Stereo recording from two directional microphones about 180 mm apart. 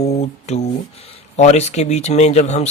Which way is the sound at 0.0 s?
40° left (ahead or behind).